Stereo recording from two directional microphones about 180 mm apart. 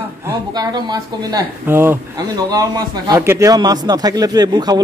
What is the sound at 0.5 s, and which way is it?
Speech, 25° right (ahead or behind).